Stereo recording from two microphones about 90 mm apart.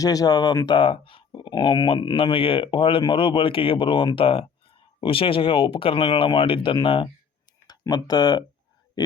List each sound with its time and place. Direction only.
0.0 s speech: 40° left (ahead or behind); by 7.1 s 75° left (ahead or behind)
7.7 s speech: 50° left (ahead or behind)